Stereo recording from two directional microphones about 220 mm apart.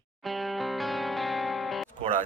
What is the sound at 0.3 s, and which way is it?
Music, centre (ahead or behind).